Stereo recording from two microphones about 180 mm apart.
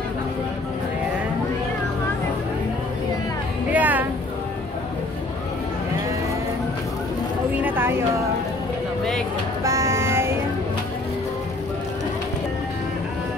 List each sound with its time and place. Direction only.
3.7 s music: 10° right (ahead or behind)
7.6 s a sound: 10° right (ahead or behind)
9.6 s music: 15° right (ahead or behind)